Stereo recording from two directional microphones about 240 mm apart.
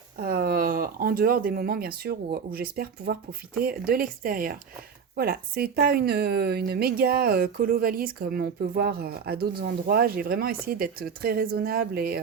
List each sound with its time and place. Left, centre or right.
0.2 s a woman's voice: right